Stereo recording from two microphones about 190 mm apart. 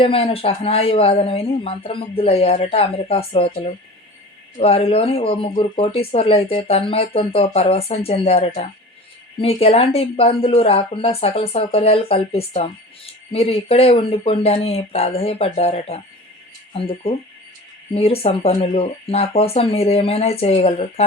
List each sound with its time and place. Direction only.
0.0 s a woman's voice: 30° left (ahead or behind)